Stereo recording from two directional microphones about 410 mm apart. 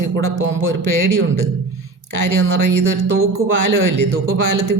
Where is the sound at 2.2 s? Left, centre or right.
Right.